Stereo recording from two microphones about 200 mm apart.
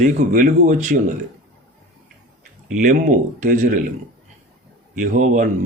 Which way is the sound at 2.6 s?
40° right (ahead or behind).